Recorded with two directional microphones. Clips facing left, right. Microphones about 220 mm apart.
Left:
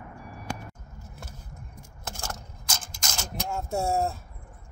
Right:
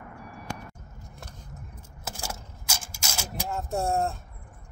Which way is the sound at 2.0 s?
5° right (ahead or behind).